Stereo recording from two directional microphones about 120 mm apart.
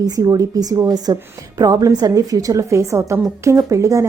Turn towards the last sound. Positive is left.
turn(degrees=-25)  # may be behind; listen again after turning